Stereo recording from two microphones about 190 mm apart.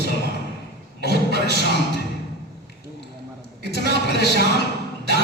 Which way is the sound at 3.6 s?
60° right (ahead or behind).